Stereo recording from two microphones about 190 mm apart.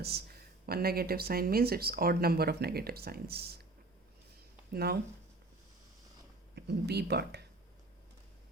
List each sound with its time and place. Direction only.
0.0 s speech: 55° right (ahead or behind)
4.7 s speech: 55° right (ahead or behind)
6.6 s speech: 60° right (ahead or behind)